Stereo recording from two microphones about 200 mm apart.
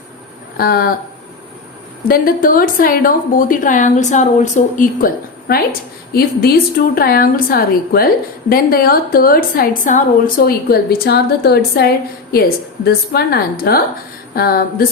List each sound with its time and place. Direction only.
0.5 s a woman's voice: 50° left (ahead or behind)
2.0 s a woman's voice: 45° left (ahead or behind)